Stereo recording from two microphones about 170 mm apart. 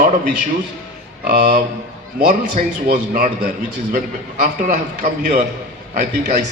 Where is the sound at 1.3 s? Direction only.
50° right (ahead or behind).